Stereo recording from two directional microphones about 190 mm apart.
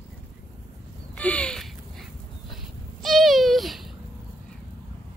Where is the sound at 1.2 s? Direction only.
5° left (ahead or behind).